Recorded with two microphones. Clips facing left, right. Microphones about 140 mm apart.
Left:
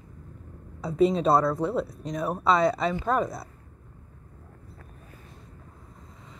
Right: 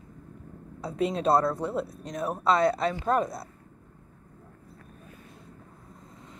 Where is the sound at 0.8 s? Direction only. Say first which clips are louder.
Left 5 dB; centre (ahead or behind).